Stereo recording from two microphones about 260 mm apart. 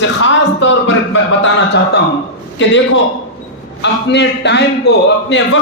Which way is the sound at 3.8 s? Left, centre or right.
Left.